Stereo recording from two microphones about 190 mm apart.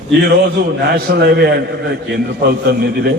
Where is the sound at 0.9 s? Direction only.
55° right (ahead or behind).